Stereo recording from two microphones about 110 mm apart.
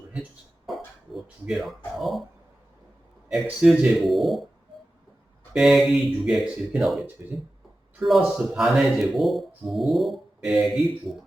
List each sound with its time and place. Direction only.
0.7 s a sound: centre (ahead or behind)
2.0 s speech: centre (ahead or behind)
3.4 s speech: 5° right (ahead or behind)
5.5 s speech: centre (ahead or behind)
7.2 s speech: 20° right (ahead or behind)
8.0 s speech: centre (ahead or behind)